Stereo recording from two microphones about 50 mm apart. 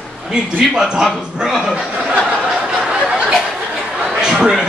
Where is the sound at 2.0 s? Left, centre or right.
Centre.